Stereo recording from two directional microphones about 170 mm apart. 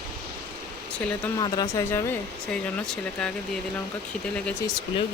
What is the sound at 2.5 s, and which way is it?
Speech, 5° left (ahead or behind).